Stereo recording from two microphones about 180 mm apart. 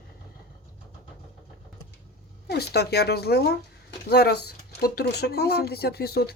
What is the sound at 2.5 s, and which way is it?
Speech, 60° left (ahead or behind).